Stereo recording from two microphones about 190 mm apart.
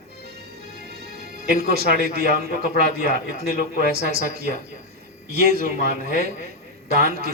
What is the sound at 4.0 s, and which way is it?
A man's voice, 55° right (ahead or behind).